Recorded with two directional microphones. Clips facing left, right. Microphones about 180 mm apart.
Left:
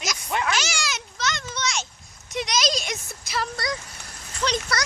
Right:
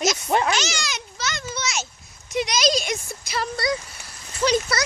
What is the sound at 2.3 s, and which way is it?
Speech, centre (ahead or behind).